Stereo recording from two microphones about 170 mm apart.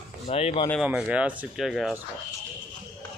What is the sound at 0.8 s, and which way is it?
A man's voice, 5° right (ahead or behind).